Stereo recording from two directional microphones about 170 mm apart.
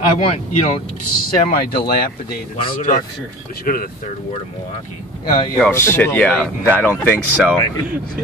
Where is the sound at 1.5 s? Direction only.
60° left (ahead or behind).